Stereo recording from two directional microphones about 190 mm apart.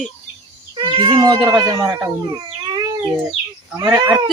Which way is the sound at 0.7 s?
25° right (ahead or behind).